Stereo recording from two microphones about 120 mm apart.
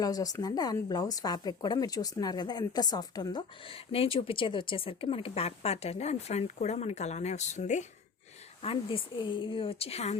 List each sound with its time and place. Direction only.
0.0 s speech: 30° left (ahead or behind); by 7.9 s 75° left (ahead or behind)
8.6 s speech: 50° left (ahead or behind)